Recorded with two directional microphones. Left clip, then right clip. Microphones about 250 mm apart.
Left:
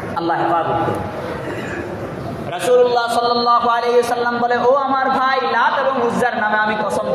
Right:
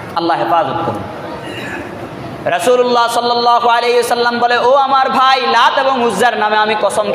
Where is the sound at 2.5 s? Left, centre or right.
Right.